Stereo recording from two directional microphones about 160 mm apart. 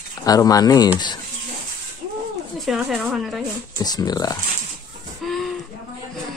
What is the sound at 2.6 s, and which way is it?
Speech, centre (ahead or behind).